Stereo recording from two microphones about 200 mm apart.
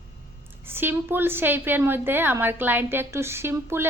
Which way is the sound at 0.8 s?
10° right (ahead or behind).